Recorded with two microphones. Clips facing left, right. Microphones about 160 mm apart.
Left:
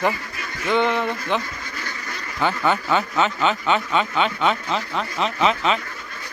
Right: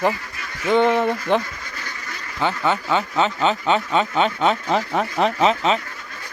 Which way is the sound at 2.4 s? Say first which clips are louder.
Even; 25° right (ahead or behind).